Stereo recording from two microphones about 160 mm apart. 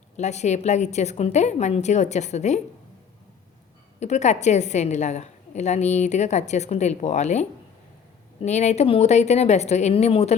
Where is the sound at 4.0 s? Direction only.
45° left (ahead or behind).